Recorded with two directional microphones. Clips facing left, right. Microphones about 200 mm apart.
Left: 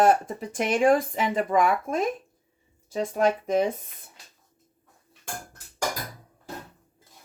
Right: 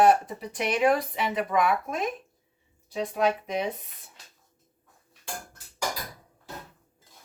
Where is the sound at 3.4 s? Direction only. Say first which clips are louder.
Left 6 dB; 45° left (ahead or behind).